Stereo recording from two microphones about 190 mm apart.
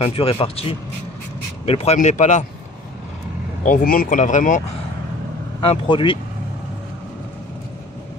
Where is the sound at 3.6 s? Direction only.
50° left (ahead or behind).